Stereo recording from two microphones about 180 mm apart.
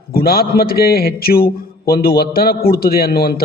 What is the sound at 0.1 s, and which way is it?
A man's voice, 55° left (ahead or behind).